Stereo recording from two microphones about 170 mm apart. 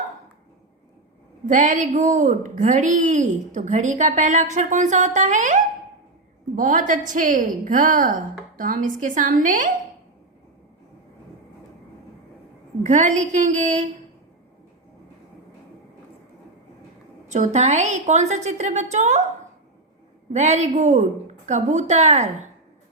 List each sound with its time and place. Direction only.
1.5 s a woman's voice: 45° right (ahead or behind)
6.6 s a woman's voice: 50° right (ahead or behind)
12.8 s a woman's voice: 45° right (ahead or behind)
17.2 s a woman's voice: 45° right (ahead or behind)
20.3 s a woman's voice: 40° right (ahead or behind)